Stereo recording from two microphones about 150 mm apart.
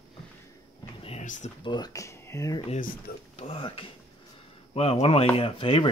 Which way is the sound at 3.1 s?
90° left.